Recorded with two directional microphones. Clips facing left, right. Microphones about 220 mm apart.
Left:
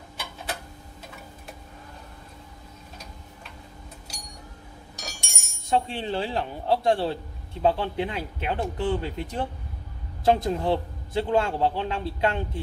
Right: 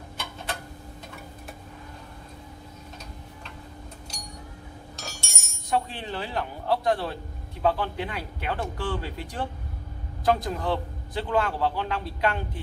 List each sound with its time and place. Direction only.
5.0 s telephone bell ringing: 15° left (ahead or behind)
5.9 s a man's voice: 25° left (ahead or behind)